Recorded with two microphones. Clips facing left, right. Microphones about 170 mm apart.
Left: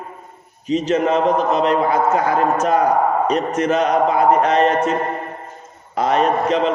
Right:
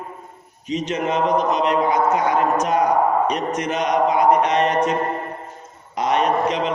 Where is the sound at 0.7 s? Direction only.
35° left (ahead or behind).